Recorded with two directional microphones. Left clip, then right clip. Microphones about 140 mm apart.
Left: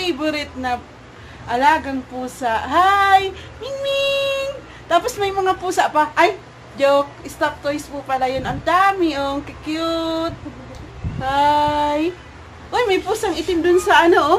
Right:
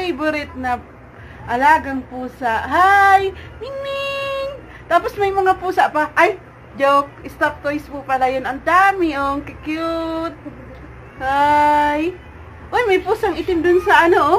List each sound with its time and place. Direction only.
0.0 s speech: 15° right (ahead or behind)
2.4 s female singing: centre (ahead or behind)
6.8 s a woman's voice: 10° right (ahead or behind)